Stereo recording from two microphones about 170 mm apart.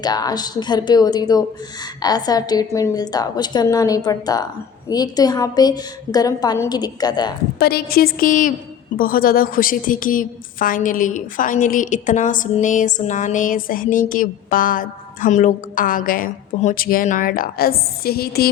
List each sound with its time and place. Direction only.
0.0 s a woman's voice: 25° left (ahead or behind)
7.6 s a woman's voice: 65° left (ahead or behind)